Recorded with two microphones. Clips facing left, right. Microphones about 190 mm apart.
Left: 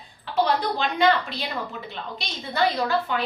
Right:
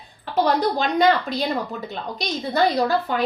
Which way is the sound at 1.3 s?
40° right (ahead or behind).